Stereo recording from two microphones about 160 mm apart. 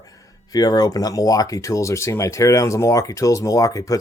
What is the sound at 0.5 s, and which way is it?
Speech, 25° left (ahead or behind).